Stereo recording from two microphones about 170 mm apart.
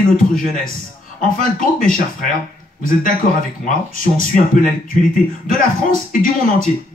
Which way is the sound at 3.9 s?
55° left (ahead or behind).